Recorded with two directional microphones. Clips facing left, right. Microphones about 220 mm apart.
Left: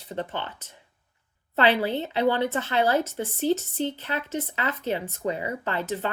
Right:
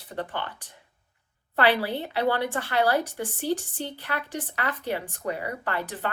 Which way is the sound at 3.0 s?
15° right (ahead or behind).